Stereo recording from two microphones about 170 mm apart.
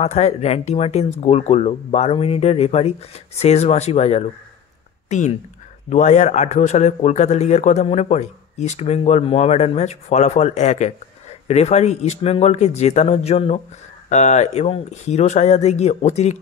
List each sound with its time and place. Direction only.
0.0 s a man's voice: 40° left (ahead or behind)
5.9 s a man's voice: 45° left (ahead or behind)